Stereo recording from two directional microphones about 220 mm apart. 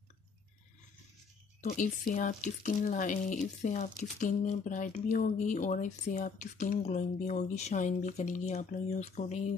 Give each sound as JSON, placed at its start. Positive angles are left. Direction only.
{"t": 1.7, "sound": "speech", "side_deg": 40}